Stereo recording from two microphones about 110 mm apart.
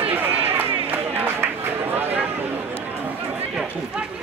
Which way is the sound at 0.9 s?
15° right (ahead or behind).